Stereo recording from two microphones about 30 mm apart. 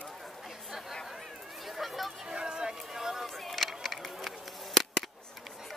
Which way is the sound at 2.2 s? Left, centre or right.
Right.